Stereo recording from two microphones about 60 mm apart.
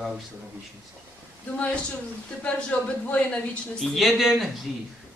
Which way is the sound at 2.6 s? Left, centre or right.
Centre.